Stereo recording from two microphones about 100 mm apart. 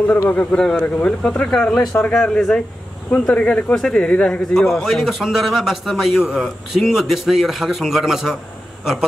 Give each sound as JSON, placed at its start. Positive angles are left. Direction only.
{"t": 0.3, "sound": "a man's voice", "side_deg": 15}